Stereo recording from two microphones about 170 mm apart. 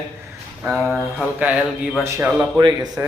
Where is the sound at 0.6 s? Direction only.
Centre (ahead or behind).